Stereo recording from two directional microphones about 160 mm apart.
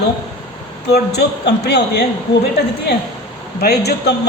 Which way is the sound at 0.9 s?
90° left.